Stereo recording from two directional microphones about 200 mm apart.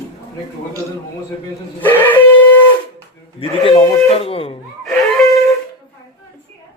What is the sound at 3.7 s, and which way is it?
Speech, 30° left (ahead or behind).